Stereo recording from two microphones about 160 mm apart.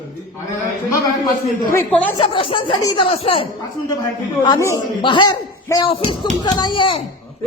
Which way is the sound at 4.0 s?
25° left (ahead or behind).